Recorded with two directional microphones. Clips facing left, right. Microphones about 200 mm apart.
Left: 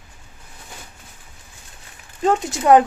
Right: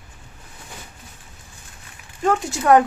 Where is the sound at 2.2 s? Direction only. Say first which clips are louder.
Left 2 dB; 20° left (ahead or behind).